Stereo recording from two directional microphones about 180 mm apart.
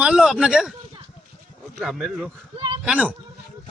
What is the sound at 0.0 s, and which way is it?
Speech, 5° right (ahead or behind).